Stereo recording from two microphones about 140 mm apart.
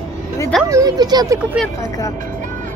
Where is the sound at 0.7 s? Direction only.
25° right (ahead or behind).